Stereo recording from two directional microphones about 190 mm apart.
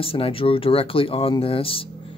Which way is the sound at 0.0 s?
30° left (ahead or behind).